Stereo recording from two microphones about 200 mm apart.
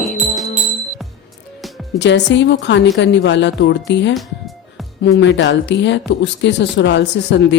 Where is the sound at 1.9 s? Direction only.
60° left (ahead or behind).